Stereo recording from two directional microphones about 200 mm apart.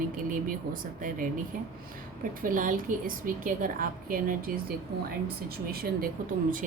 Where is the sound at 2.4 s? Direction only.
40° right (ahead or behind).